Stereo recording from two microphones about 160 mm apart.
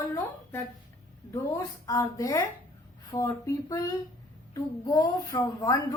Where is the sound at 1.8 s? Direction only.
20° left (ahead or behind).